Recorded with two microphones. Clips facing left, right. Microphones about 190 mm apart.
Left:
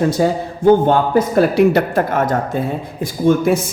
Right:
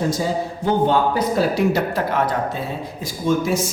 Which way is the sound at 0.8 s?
50° left (ahead or behind).